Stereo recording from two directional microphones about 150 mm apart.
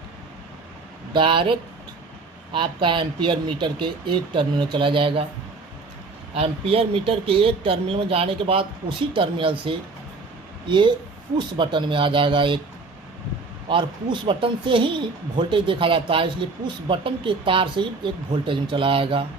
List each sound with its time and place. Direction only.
1.1 s speech: 35° right (ahead or behind)
6.3 s speech: 40° right (ahead or behind)
13.7 s speech: 35° right (ahead or behind)